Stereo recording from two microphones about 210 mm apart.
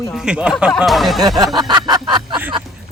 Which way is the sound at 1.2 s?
20° right (ahead or behind).